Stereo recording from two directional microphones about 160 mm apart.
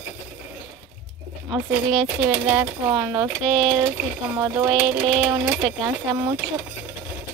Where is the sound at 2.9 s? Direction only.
20° right (ahead or behind).